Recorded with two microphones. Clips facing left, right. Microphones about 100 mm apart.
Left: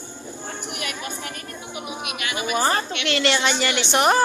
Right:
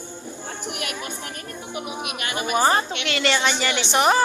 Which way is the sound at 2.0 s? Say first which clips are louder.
Left 2 dB; 40° right (ahead or behind).